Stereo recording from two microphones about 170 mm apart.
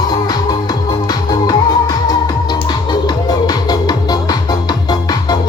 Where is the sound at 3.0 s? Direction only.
25° left (ahead or behind).